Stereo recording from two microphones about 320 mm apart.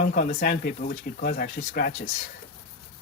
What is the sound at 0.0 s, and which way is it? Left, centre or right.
Speech, left.